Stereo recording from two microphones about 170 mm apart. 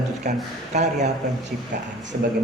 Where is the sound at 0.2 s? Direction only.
45° right (ahead or behind).